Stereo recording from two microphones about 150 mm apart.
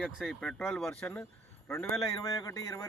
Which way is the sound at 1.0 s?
15° left (ahead or behind).